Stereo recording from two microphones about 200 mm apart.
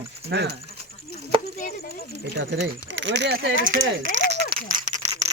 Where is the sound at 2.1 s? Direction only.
60° right (ahead or behind).